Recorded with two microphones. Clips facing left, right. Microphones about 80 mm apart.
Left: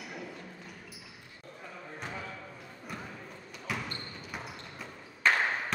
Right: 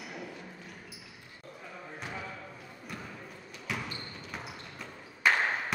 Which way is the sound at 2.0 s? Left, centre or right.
Centre.